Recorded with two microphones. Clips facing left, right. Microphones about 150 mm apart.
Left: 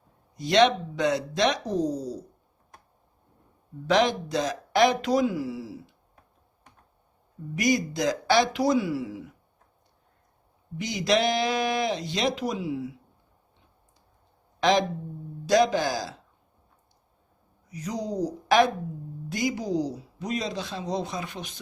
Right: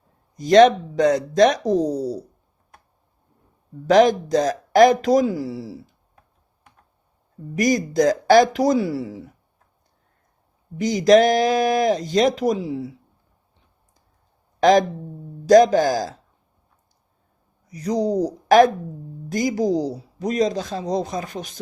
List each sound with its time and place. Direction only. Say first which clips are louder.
0.3 s speech: right 8 dB; 45° right (ahead or behind)
3.8 s speech: right 8 dB; 45° right (ahead or behind)
7.5 s speech: right 6 dB; 45° right (ahead or behind)
10.8 s speech: right 10 dB; 40° right (ahead or behind)
14.6 s speech: right 7 dB; 45° right (ahead or behind)
17.7 s speech: right 10 dB; 35° right (ahead or behind)